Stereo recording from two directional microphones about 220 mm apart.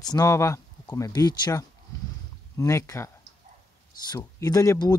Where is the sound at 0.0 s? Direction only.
15° left (ahead or behind).